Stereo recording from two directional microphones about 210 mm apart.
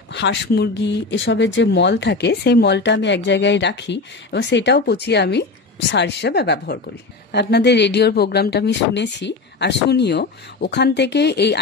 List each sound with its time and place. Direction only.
0.1 s speech: 55° left (ahead or behind)